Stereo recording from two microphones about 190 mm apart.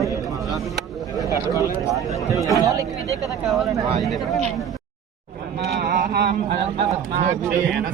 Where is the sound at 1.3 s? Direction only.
15° right (ahead or behind).